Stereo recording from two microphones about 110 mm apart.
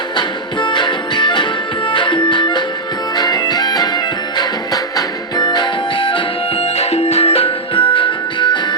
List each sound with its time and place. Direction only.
0.2 s music: 45° left (ahead or behind)
6.7 s music: 70° left (ahead or behind); by 8.5 s 50° left (ahead or behind)